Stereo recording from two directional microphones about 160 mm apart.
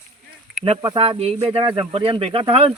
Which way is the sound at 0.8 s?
30° right (ahead or behind).